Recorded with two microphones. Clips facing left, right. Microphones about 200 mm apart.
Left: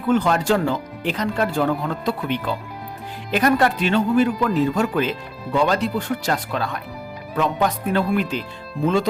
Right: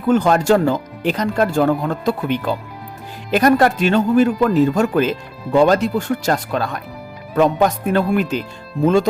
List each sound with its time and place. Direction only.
0.1 s speech: 45° right (ahead or behind)